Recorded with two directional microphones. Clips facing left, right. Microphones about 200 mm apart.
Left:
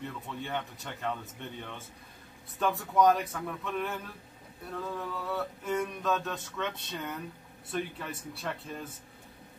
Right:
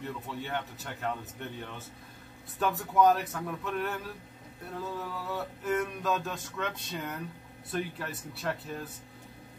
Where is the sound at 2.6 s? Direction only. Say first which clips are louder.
Even; centre (ahead or behind).